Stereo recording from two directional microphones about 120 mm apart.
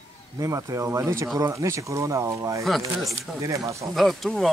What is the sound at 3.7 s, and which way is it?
Speech, 25° right (ahead or behind).